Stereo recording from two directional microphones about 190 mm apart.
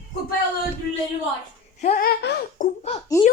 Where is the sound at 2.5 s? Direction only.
35° left (ahead or behind).